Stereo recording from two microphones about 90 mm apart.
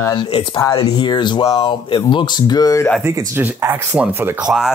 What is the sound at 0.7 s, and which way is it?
Speech, 60° left (ahead or behind).